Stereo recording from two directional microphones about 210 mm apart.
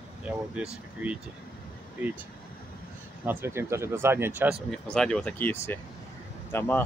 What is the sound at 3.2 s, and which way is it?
Speech, 10° right (ahead or behind).